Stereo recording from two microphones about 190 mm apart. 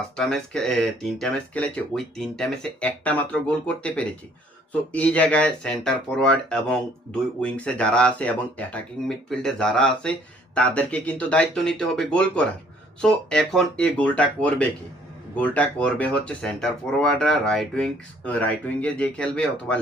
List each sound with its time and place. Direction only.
0.2 s speech: 5° left (ahead or behind)